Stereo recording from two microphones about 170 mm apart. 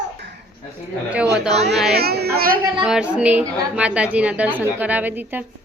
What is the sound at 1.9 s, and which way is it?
Speech, 65° right (ahead or behind).